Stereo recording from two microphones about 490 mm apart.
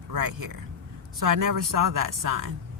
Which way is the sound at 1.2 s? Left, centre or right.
Right.